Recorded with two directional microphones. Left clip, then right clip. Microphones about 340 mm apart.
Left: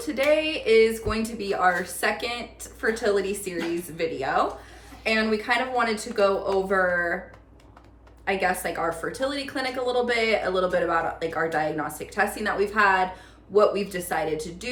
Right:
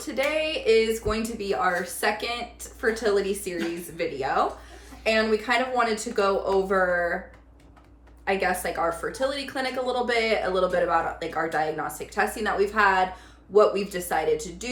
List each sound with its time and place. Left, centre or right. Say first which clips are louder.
0.0 s a woman's voice: left 3 dB; centre
8.2 s a woman's voice: even; centre